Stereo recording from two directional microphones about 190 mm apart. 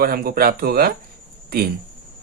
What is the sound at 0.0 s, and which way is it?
Speech, 50° right (ahead or behind).